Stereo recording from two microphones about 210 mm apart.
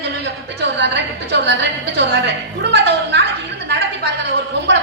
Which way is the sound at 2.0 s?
55° right (ahead or behind).